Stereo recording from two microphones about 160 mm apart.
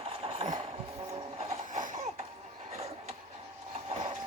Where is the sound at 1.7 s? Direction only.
55° right (ahead or behind).